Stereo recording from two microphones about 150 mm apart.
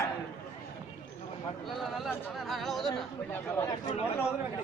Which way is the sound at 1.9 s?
Centre (ahead or behind).